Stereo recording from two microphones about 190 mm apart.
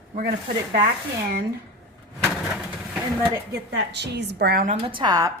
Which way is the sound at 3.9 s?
65° right (ahead or behind).